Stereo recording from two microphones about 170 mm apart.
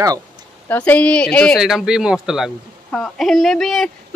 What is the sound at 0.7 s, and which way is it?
Speech, 10° left (ahead or behind).